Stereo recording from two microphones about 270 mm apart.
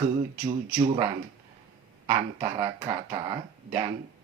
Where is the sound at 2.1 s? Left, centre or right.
Centre.